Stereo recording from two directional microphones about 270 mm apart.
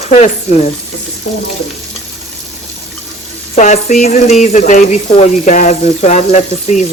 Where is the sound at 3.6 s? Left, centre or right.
Left.